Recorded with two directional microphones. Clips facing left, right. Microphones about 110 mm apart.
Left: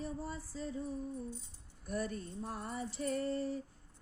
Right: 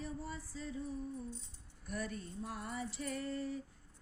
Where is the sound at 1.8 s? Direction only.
40° left (ahead or behind).